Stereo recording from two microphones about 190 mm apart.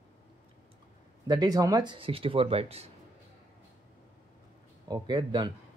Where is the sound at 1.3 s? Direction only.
20° right (ahead or behind).